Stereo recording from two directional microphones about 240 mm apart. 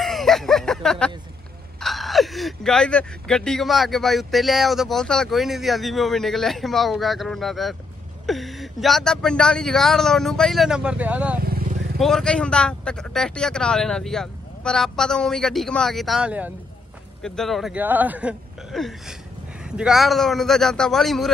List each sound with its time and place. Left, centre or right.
0.0 s a sound: centre
1.8 s speech: centre
11.4 s vehicle: right
12.0 s speech: centre